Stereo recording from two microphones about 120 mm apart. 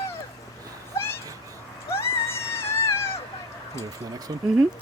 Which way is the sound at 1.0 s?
20° left (ahead or behind).